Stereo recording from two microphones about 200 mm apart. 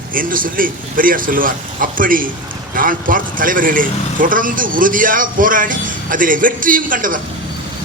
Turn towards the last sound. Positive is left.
turn(degrees=-45)  # may be behind; listen again after turning